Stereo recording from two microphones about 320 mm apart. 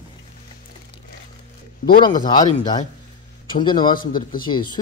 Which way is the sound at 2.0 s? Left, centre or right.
Centre.